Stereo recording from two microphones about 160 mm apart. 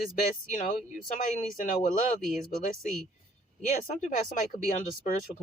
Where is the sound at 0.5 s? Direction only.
50° left (ahead or behind).